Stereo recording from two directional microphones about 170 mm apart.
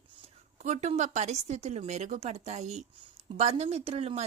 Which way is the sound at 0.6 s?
40° right (ahead or behind).